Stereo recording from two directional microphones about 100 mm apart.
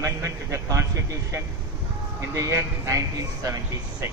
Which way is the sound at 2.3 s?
30° right (ahead or behind).